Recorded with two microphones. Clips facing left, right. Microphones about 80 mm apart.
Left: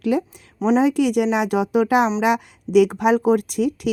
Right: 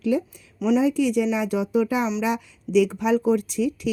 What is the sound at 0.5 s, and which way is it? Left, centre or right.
Speech, left.